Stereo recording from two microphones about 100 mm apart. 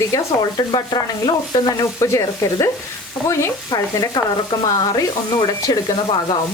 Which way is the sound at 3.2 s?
25° left (ahead or behind).